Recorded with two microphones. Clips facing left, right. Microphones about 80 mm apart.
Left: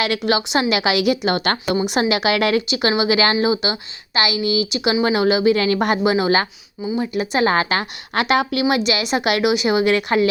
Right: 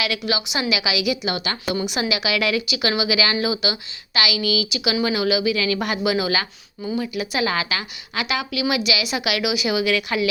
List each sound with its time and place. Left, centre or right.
0.0 s a woman's voice: left
2.6 s a woman's voice: left